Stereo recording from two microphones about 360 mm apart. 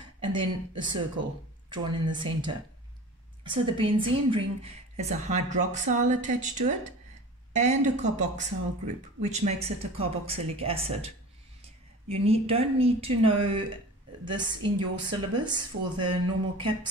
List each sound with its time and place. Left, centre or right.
0.2 s a woman's voice: centre